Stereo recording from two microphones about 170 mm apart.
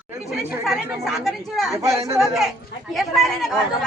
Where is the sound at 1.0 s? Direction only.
Centre (ahead or behind).